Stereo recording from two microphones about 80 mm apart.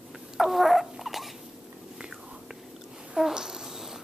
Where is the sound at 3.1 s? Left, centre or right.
Centre.